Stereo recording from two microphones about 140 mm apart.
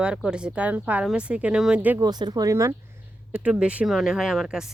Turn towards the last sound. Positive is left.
turn(degrees=-5)  # may be behind; listen again after turning